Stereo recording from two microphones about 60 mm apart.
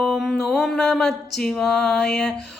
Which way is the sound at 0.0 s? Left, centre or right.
Centre.